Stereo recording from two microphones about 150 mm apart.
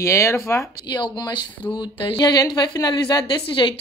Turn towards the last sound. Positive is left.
turn(degrees=30)  # may be behind; listen again after turning